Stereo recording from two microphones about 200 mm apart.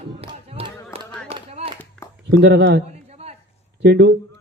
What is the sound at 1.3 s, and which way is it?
Clapping, 30° right (ahead or behind).